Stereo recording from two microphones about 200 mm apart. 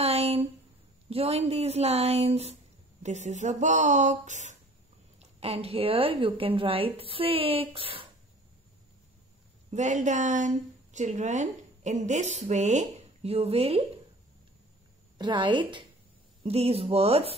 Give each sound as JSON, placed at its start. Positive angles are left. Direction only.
{"t": 0.0, "sound": "a sound", "side_deg": -30}
{"t": 1.1, "sound": "a woman's voice", "side_deg": -30}
{"t": 9.7, "sound": "a woman's voice", "side_deg": -35}
{"t": 15.1, "sound": "a woman's voice", "side_deg": -20}